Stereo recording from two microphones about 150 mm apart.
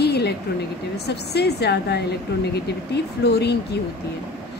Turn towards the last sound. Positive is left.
turn(degrees=90)